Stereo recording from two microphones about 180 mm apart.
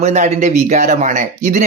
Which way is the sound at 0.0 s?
40° right (ahead or behind).